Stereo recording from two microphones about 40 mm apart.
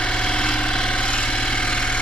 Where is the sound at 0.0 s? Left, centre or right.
Left.